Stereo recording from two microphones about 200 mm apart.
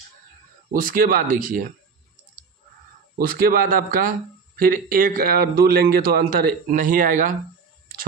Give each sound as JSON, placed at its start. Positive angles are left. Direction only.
{"t": 0.7, "sound": "speech", "side_deg": -45}
{"t": 3.2, "sound": "speech", "side_deg": -45}